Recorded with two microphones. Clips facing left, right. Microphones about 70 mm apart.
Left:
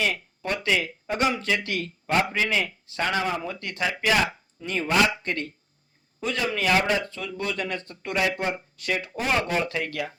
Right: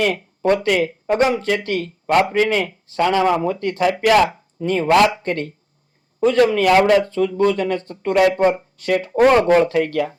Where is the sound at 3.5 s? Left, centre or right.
Right.